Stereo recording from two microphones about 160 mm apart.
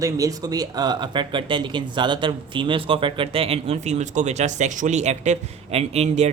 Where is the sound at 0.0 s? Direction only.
20° right (ahead or behind).